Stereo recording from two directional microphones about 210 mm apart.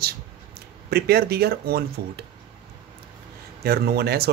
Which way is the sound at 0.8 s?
50° right (ahead or behind).